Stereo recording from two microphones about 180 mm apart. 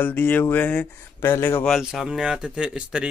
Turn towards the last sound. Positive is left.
turn(degrees=-5)  # may be behind; listen again after turning